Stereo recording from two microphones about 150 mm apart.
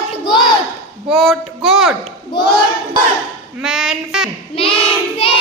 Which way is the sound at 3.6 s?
Centre (ahead or behind).